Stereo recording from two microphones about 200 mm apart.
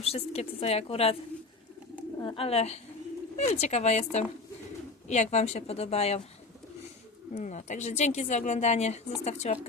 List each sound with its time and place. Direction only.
0.0 s speech: 30° left (ahead or behind)
7.3 s speech: 35° left (ahead or behind)